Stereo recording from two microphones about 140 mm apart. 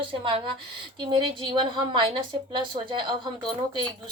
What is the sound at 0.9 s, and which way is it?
A woman's voice, 35° right (ahead or behind).